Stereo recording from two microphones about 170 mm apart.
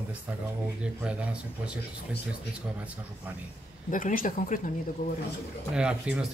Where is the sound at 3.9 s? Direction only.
50° left (ahead or behind).